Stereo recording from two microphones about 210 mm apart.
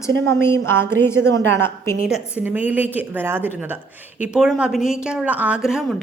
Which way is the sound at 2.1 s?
5° right (ahead or behind).